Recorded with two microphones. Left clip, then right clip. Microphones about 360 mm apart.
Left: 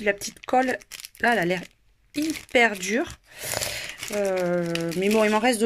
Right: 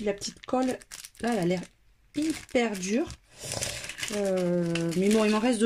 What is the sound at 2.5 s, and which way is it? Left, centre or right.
Speech, left.